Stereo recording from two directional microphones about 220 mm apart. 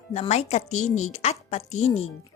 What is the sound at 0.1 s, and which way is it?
Speech, 30° left (ahead or behind).